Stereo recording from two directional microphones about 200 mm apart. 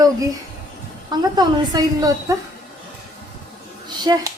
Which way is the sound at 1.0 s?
20° right (ahead or behind).